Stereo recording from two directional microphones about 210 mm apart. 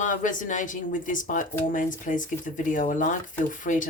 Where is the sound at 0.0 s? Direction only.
40° left (ahead or behind).